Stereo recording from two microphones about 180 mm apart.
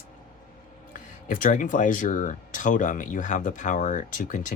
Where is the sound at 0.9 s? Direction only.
45° left (ahead or behind).